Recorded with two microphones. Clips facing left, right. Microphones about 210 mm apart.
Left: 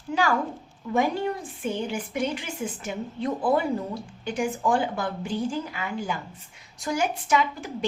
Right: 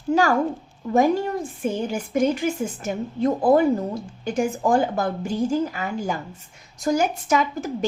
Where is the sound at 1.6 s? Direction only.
45° right (ahead or behind).